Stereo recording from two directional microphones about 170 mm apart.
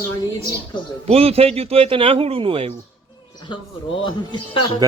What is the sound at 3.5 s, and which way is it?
Speech, 30° left (ahead or behind).